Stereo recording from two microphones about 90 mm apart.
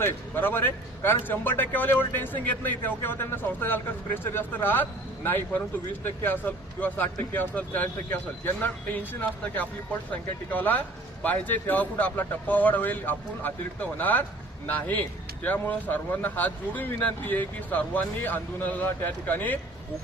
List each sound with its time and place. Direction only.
0.0 s a man's voice: 20° left (ahead or behind)
10.1 s a man's voice: 20° left (ahead or behind)